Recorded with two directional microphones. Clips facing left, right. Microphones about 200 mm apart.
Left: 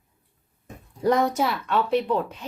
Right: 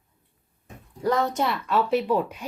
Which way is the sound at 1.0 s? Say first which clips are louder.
Left 3 dB; 20° left (ahead or behind).